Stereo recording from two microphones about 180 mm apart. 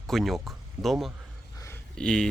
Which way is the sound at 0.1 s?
Centre (ahead or behind).